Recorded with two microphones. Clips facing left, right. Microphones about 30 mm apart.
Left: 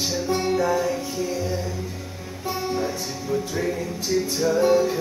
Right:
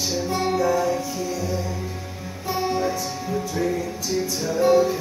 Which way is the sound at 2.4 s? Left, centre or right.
Centre.